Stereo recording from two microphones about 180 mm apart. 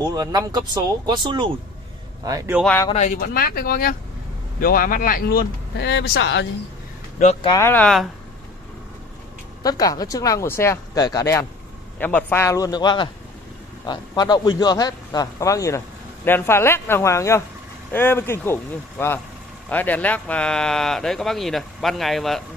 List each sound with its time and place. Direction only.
0.0 s speech: 20° right (ahead or behind)
2.6 s speech: 10° left (ahead or behind)
2.9 s speech: 40° left (ahead or behind)
3.2 s speech: 55° left (ahead or behind); by 6.4 s 80° left
7.4 s speech: 15° left (ahead or behind)
9.6 s a man's voice: 20° left (ahead or behind); by 22.4 s centre (ahead or behind)